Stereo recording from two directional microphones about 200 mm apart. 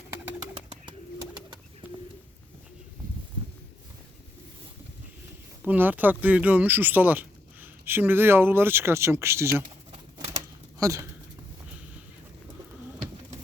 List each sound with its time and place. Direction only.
1.8 s bird: 10° right (ahead or behind)
5.6 s speech: 10° right (ahead or behind)
9.9 s typewriter: 30° right (ahead or behind)
10.8 s speech: 15° right (ahead or behind)